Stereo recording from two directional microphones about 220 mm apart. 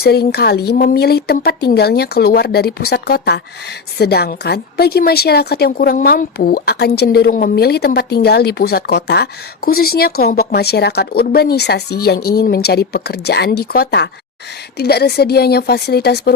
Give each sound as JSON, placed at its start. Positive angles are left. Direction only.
{"t": 0.0, "sound": "a woman's voice", "side_deg": 45}